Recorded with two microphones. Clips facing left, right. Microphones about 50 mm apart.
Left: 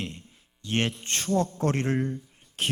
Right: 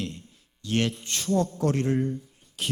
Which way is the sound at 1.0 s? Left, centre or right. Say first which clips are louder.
Even; left.